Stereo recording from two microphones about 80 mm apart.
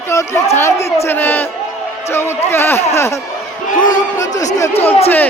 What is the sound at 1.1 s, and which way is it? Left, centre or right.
A man's voice, left.